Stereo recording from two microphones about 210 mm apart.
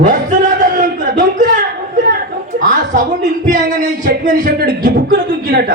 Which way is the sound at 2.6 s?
40° right (ahead or behind).